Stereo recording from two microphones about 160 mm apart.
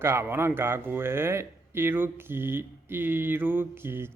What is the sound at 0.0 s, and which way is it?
A man's voice, 15° right (ahead or behind).